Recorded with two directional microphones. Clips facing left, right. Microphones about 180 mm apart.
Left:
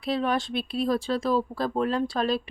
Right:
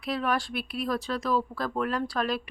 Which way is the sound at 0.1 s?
25° left (ahead or behind).